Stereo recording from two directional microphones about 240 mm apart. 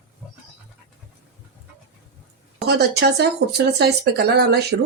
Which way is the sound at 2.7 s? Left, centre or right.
Right.